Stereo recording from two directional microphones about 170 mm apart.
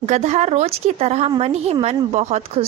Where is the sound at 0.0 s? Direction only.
40° right (ahead or behind).